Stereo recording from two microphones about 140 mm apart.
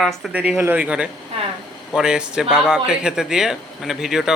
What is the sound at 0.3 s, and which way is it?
Speech, 10° right (ahead or behind).